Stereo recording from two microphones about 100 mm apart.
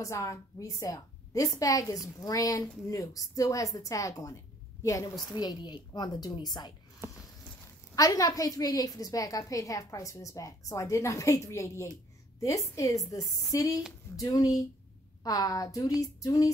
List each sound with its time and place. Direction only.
0.0 s a woman's voice: 35° left (ahead or behind)
5.3 s a woman's voice: 45° left (ahead or behind)
7.0 s a sound: 25° right (ahead or behind)
7.9 s a woman's voice: 35° left (ahead or behind)